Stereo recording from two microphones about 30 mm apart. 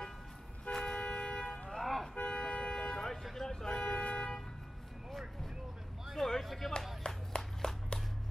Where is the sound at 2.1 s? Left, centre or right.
Left.